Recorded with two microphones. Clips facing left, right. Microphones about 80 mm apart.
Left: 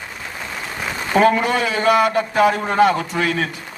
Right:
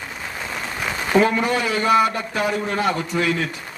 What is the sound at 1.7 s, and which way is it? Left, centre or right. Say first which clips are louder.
Speech: left 2 dB; left.